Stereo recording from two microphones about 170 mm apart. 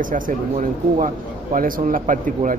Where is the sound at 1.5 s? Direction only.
55° right (ahead or behind).